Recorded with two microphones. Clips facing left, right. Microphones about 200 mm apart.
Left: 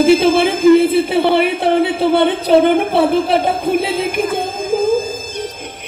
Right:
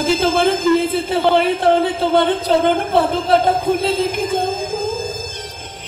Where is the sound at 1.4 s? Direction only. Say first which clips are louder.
Left 1 dB; 65° left (ahead or behind).